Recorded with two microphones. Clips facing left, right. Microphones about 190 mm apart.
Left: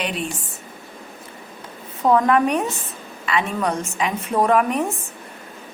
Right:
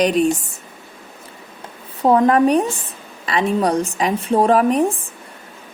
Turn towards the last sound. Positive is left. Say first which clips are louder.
# right 4 dB
turn(degrees=-30)  # may be behind; listen again after turning